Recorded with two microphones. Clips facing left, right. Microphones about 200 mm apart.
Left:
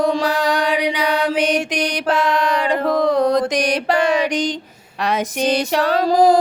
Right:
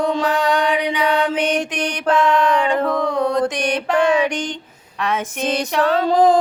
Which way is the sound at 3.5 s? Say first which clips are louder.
Left 2 dB; 35° left (ahead or behind).